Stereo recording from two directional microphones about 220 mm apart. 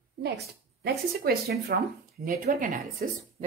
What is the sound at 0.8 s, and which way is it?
Speech, 45° right (ahead or behind).